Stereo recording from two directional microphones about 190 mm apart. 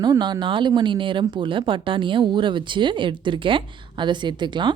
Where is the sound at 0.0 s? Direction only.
20° right (ahead or behind).